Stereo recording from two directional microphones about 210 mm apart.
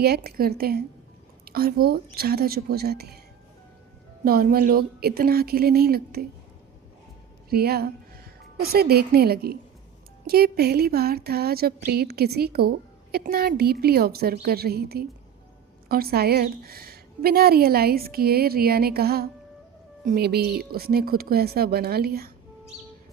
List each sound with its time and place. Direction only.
0.0 s speech: 50° right (ahead or behind)
4.2 s speech: 45° right (ahead or behind)
7.5 s speech: 50° right (ahead or behind)